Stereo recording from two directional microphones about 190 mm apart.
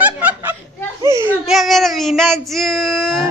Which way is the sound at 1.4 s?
Centre (ahead or behind).